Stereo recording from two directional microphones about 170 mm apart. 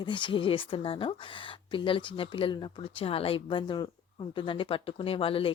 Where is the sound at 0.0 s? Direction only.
30° left (ahead or behind).